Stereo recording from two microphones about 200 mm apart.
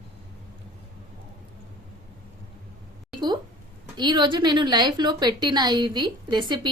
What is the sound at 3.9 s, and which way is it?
A woman's voice, 20° right (ahead or behind).